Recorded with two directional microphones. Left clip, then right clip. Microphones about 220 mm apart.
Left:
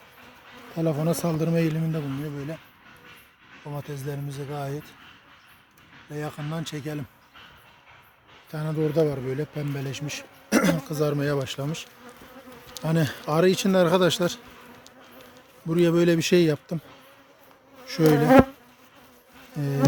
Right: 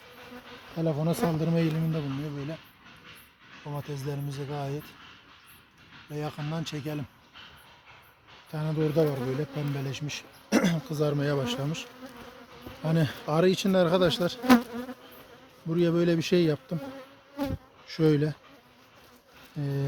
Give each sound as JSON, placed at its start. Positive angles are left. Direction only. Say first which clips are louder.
{"t": 0.8, "sound": "speech", "louder": "left 3 dB", "side_deg": 25}
{"t": 3.7, "sound": "speech", "louder": "left 2 dB", "side_deg": 10}
{"t": 6.1, "sound": "speech", "louder": "left 2 dB", "side_deg": 10}
{"t": 8.4, "sound": "speech", "louder": "left 2 dB", "side_deg": 10}
{"t": 15.7, "sound": "a man's voice", "louder": "left 5 dB", "side_deg": 35}
{"t": 17.8, "sound": "speech", "louder": "left 5 dB", "side_deg": 30}
{"t": 19.5, "sound": "bee", "louder": "left 5 dB", "side_deg": 25}